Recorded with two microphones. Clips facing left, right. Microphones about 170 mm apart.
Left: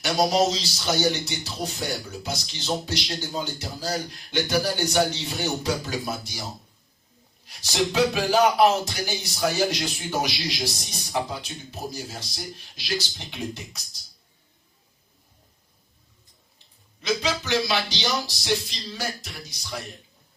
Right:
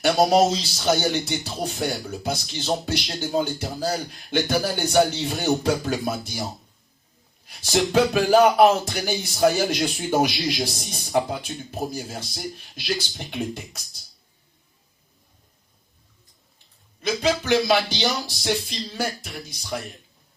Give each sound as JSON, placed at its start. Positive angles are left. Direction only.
{"t": 0.0, "sound": "speech", "side_deg": -55}
{"t": 7.4, "sound": "speech", "side_deg": -55}
{"t": 17.0, "sound": "speech", "side_deg": -50}